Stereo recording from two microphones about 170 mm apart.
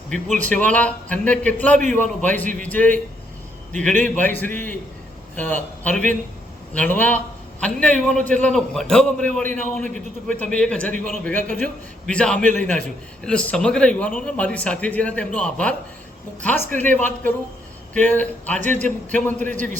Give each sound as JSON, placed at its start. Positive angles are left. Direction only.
{"t": 0.1, "sound": "a man's voice", "side_deg": 5}
{"t": 10.9, "sound": "a man's voice", "side_deg": -50}
{"t": 11.2, "sound": "a man's voice", "side_deg": 10}